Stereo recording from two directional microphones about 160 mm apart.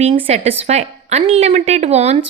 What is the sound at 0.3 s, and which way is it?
A woman's voice, 40° right (ahead or behind).